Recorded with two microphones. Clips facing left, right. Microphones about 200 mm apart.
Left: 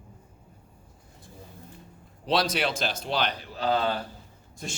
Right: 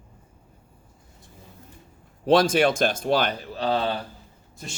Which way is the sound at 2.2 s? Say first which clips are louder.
Right 8 dB; 50° right (ahead or behind).